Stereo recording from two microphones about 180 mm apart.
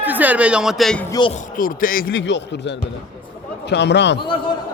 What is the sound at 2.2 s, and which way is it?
A man's voice, 85° left.